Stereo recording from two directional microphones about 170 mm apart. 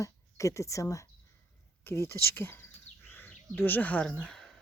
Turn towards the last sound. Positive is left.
turn(degrees=5)  # may be behind; listen again after turning